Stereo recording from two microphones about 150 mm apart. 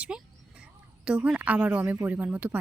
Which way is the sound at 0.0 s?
5° right (ahead or behind).